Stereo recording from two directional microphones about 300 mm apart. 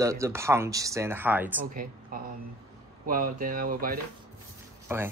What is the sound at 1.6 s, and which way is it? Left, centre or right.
A woman's voice, right.